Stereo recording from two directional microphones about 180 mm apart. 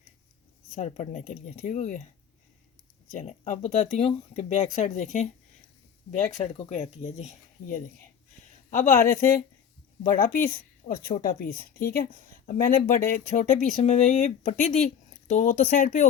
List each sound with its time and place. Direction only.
0.8 s speech: 40° left (ahead or behind)
3.1 s speech: 40° left (ahead or behind)
10.0 s speech: 50° left (ahead or behind)